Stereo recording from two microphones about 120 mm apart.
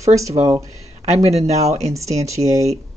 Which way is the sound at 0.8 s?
65° right (ahead or behind).